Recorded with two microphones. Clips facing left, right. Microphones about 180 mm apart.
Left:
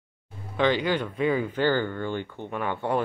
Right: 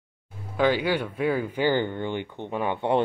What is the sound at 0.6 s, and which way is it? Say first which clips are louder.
Speech: right 1 dB; 10° right (ahead or behind).